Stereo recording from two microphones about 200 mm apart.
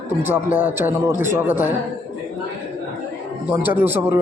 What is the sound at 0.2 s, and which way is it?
A man's voice, 10° right (ahead or behind).